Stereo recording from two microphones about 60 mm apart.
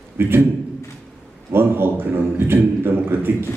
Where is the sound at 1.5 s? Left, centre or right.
Right.